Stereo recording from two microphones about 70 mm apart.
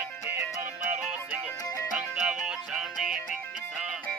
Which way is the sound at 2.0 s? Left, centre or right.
Centre.